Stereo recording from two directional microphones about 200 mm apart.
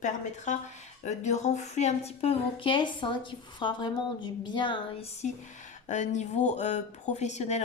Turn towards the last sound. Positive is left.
turn(degrees=35)  # may be behind; listen again after turning